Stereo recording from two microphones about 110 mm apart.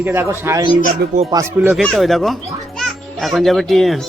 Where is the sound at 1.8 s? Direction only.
Centre (ahead or behind).